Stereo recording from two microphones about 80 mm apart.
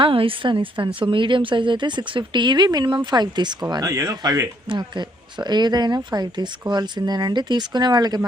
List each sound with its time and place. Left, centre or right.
0.0 s a woman's voice: right
3.9 s speech: right
4.8 s speech: right